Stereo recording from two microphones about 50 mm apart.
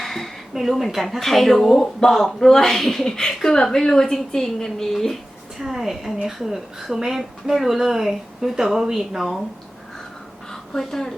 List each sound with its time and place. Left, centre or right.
0.0 s a sound: centre
0.5 s speech: centre
5.5 s speech: centre
10.5 s speech: centre